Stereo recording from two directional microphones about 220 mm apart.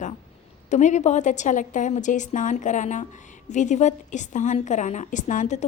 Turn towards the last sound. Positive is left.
turn(degrees=35)  # may be behind; listen again after turning